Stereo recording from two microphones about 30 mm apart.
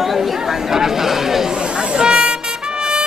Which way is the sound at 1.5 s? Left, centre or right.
Right.